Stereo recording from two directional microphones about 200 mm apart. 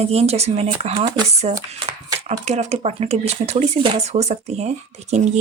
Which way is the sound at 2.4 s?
35° right (ahead or behind).